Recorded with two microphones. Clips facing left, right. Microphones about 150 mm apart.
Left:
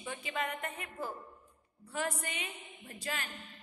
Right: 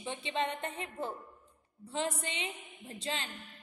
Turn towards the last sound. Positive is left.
turn(degrees=-25)  # may be behind; listen again after turning